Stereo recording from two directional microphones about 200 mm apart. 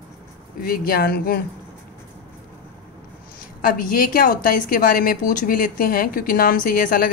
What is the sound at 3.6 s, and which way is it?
A woman's voice, 45° left (ahead or behind).